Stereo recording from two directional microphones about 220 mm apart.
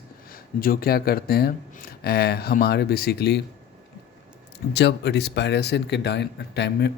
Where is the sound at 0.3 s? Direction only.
40° left (ahead or behind).